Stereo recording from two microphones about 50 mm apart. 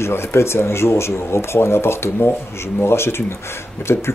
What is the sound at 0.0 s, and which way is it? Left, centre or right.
Speech, left.